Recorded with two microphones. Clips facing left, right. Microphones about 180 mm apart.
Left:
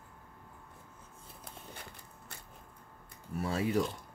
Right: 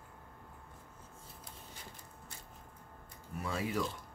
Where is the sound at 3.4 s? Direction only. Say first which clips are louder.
Left 5 dB; 35° left (ahead or behind).